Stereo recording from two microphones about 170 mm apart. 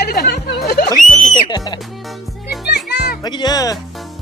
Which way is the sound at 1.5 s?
25° left (ahead or behind).